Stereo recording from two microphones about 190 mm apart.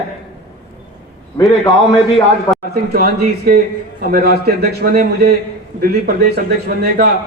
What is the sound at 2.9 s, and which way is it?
A man's voice, 50° right (ahead or behind).